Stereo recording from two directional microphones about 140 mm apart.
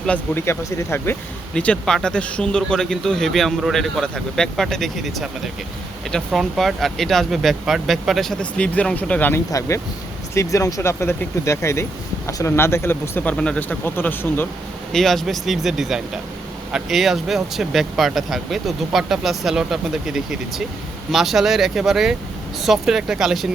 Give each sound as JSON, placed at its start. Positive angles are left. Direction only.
{"t": 0.0, "sound": "speech", "side_deg": 10}
{"t": 0.4, "sound": "speech", "side_deg": 20}
{"t": 9.5, "sound": "speech", "side_deg": 20}
{"t": 14.9, "sound": "speech", "side_deg": 0}